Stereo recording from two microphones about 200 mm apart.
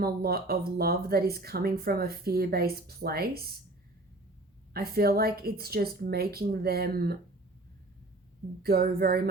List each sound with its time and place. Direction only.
0.0 s speech: 50° right (ahead or behind)
4.7 s speech: 50° right (ahead or behind)
8.6 s speech: 50° right (ahead or behind)